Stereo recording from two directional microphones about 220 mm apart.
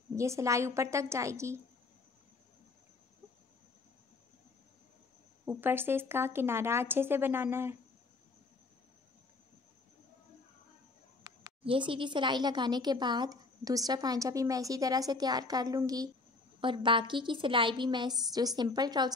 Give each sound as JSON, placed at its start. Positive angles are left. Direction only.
{"t": 0.1, "sound": "speech", "side_deg": -15}
{"t": 5.4, "sound": "speech", "side_deg": -10}
{"t": 11.2, "sound": "a woman's voice", "side_deg": -20}